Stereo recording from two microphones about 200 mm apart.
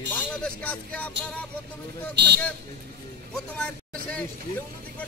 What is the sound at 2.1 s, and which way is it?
Speech, 55° right (ahead or behind).